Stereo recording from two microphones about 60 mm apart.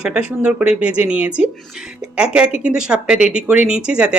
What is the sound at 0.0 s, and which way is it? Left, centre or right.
A woman's voice, centre.